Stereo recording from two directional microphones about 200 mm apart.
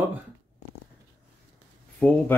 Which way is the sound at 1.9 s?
5° left (ahead or behind).